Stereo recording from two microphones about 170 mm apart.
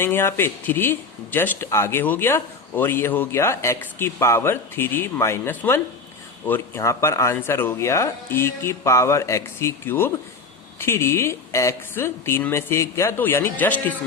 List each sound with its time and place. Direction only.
0.0 s speech: 15° left (ahead or behind)